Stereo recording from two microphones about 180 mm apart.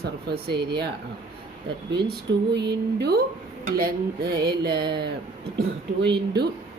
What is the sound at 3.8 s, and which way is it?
Speech, 60° right (ahead or behind).